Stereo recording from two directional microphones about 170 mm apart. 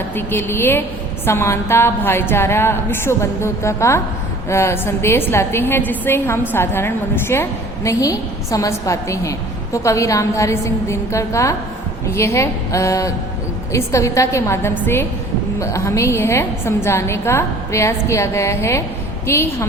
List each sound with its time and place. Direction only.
0.2 s a woman's voice: 15° left (ahead or behind)